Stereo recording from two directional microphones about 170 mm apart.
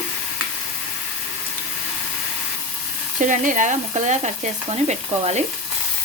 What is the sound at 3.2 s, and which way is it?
Stir, 50° right (ahead or behind).